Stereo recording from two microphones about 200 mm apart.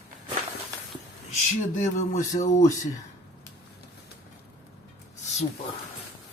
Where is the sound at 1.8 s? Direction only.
40° left (ahead or behind).